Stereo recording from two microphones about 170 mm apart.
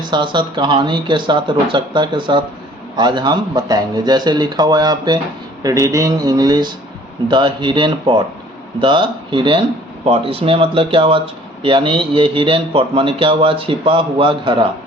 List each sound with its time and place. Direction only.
0.0 s a man's voice: 25° right (ahead or behind)